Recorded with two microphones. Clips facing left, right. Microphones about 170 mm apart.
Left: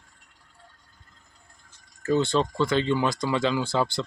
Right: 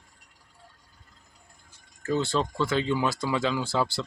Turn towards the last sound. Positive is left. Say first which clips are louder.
# left 2 dB
turn(degrees=-5)  # may be behind; listen again after turning